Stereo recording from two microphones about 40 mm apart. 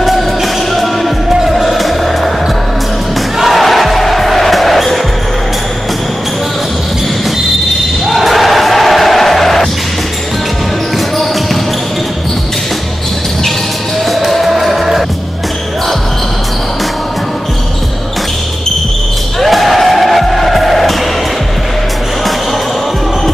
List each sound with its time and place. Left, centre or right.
0.0 s music: centre
3.3 s music: centre
8.1 s music: centre
14.0 s music: centre
19.4 s music: centre